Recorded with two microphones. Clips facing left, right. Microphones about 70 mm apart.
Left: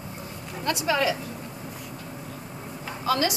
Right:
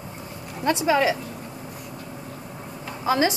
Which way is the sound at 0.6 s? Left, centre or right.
Right.